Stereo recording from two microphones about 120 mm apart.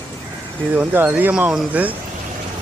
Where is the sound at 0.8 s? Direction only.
15° right (ahead or behind).